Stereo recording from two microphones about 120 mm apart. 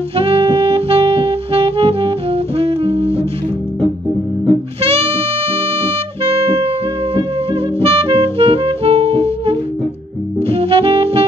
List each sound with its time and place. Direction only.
0.2 s saxophone: 50° right (ahead or behind)
5.8 s music: 55° right (ahead or behind)
7.8 s music: 50° right (ahead or behind)